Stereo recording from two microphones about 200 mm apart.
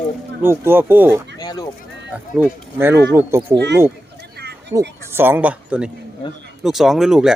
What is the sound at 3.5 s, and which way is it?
Speech, 60° right (ahead or behind).